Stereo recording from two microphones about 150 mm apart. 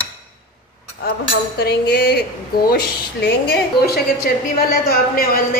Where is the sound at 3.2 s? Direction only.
90° left.